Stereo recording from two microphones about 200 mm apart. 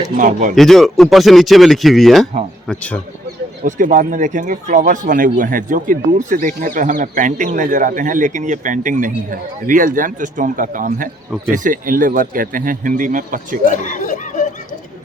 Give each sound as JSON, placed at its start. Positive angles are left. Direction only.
{"t": 0.2, "sound": "speech", "side_deg": -40}
{"t": 0.5, "sound": "speech", "side_deg": 0}
{"t": 3.7, "sound": "speech", "side_deg": -40}
{"t": 13.7, "sound": "snicker", "side_deg": 40}